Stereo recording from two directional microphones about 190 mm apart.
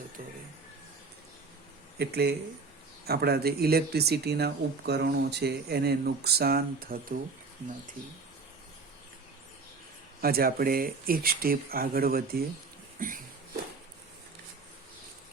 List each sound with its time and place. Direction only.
2.0 s speech: 55° right (ahead or behind)
10.2 s speech: 50° right (ahead or behind)